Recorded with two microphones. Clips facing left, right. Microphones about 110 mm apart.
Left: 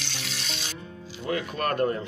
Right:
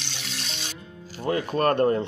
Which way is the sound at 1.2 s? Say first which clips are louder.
Right 5 dB; 35° right (ahead or behind).